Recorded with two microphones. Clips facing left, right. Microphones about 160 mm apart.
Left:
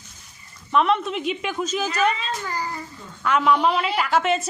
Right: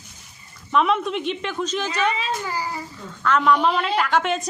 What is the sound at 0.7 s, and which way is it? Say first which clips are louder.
A woman's voice: even; centre (ahead or behind).